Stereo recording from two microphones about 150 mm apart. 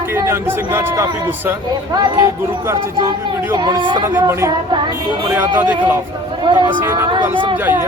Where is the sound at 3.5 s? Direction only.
30° right (ahead or behind).